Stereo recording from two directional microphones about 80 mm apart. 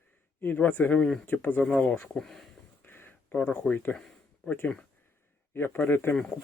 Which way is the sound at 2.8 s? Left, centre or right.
Left.